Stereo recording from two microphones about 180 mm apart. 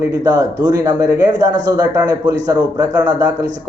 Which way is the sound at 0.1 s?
20° right (ahead or behind).